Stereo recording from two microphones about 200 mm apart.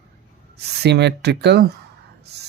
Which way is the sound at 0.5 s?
55° right (ahead or behind).